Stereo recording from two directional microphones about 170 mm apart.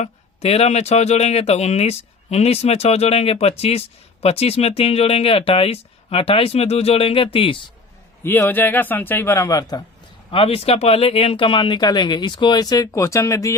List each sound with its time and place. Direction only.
0.0 s speech: 40° left (ahead or behind)
8.2 s speech: 15° left (ahead or behind)
10.3 s speech: 35° left (ahead or behind); by 13.5 s 20° left (ahead or behind)